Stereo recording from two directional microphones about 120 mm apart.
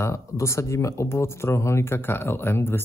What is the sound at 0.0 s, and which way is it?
Speech, 25° left (ahead or behind).